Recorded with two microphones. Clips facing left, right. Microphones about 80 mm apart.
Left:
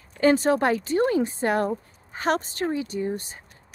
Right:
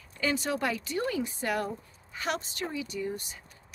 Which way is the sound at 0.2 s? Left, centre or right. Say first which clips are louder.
Left 10 dB; left.